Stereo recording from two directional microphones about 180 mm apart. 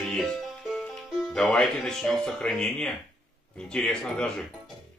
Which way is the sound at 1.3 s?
5° left (ahead or behind).